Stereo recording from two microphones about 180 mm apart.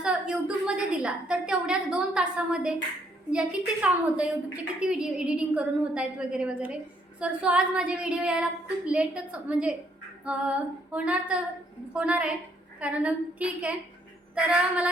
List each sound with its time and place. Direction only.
0.0 s a sound: 5° right (ahead or behind)
3.3 s female singing: 5° right (ahead or behind)
4.5 s a woman's voice: 5° right (ahead or behind)
10.2 s female singing: 5° right (ahead or behind)
11.9 s a woman's voice: 5° right (ahead or behind)
12.8 s female singing: 5° right (ahead or behind)
14.3 s a woman's voice: 5° right (ahead or behind)